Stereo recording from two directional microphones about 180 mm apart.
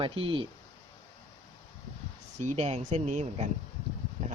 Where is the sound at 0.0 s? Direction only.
30° right (ahead or behind).